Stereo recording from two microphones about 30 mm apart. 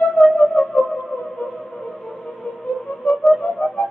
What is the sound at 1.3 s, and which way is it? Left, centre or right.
Music, left.